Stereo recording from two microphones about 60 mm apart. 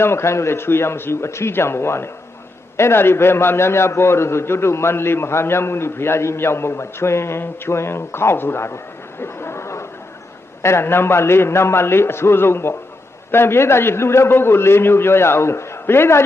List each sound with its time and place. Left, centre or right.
0.0 s a man's voice: left
9.2 s a sound: left
10.6 s a man's voice: left